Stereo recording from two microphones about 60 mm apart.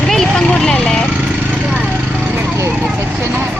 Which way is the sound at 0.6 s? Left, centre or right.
Centre.